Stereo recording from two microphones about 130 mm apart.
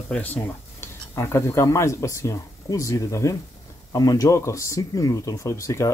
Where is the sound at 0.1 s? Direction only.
15° left (ahead or behind).